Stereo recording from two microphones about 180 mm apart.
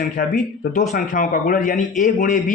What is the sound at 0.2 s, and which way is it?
Speech, 45° left (ahead or behind).